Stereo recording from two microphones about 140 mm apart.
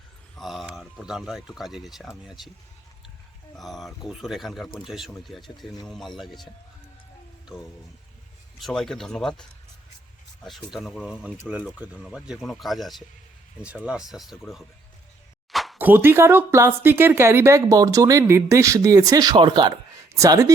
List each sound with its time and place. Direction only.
0.3 s speech: centre (ahead or behind)
3.5 s speech: centre (ahead or behind)
8.5 s speech: centre (ahead or behind)
15.5 s a sound: centre (ahead or behind)
15.8 s speech: 15° right (ahead or behind)